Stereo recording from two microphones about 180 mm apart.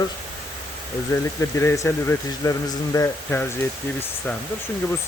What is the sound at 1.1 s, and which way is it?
Speech, 15° left (ahead or behind).